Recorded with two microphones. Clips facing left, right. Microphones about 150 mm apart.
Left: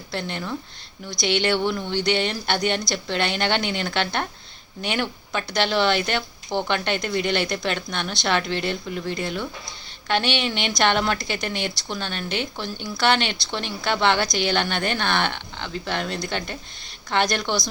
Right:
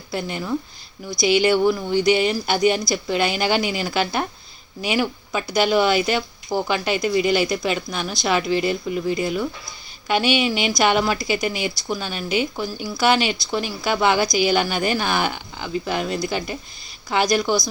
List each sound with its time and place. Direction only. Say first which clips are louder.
0.1 s a woman's voice: right 4 dB; 5° right (ahead or behind)